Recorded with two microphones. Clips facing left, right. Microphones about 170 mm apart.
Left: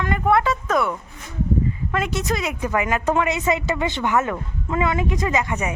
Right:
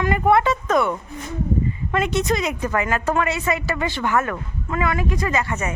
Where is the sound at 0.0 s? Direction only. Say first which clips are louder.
Right 2 dB; 5° right (ahead or behind); by 5.7 s 15° left (ahead or behind).